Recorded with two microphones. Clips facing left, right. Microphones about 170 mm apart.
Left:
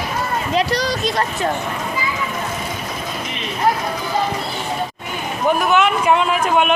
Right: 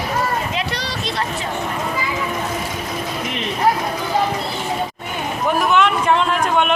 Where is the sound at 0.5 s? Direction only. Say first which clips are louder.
Left 6 dB; 40° left (ahead or behind).